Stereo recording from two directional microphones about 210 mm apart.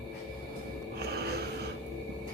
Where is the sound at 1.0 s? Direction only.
50° right (ahead or behind).